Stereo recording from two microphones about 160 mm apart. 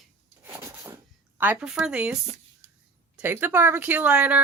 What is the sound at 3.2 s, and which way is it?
Speech, 15° right (ahead or behind).